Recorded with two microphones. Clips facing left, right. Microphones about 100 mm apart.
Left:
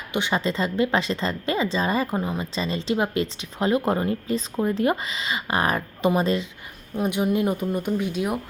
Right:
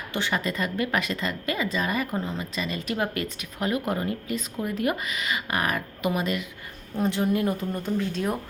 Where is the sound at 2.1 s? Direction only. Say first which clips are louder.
Left 3 dB; 15° left (ahead or behind).